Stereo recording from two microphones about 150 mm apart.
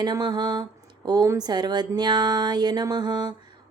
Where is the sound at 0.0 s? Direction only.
30° right (ahead or behind).